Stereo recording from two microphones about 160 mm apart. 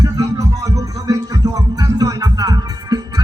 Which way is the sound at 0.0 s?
20° right (ahead or behind).